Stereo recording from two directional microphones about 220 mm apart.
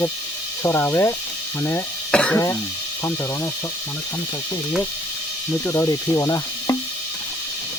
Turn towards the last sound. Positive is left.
turn(degrees=15)  # may be behind; listen again after turning